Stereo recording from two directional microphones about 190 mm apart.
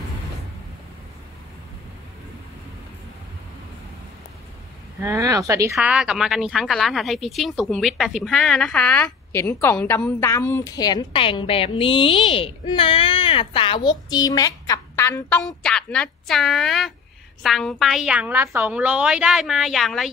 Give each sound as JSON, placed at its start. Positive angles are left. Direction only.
{"t": 5.0, "sound": "a child's voice", "side_deg": -15}